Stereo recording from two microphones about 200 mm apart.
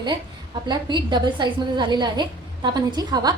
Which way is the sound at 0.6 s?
20° right (ahead or behind).